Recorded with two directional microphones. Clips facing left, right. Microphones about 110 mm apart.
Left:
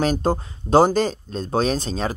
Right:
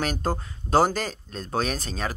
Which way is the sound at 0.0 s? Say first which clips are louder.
Left 7 dB; 20° left (ahead or behind).